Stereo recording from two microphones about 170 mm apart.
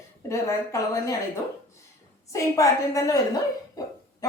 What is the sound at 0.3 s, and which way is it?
Speech, 20° left (ahead or behind).